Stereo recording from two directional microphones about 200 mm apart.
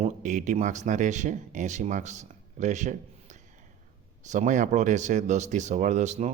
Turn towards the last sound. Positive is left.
turn(degrees=-35)  # may be behind; listen again after turning